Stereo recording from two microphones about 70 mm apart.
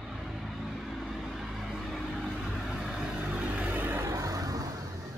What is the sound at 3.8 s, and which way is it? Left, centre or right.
Music, right.